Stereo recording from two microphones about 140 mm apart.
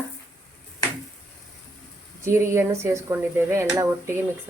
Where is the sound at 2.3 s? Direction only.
20° right (ahead or behind).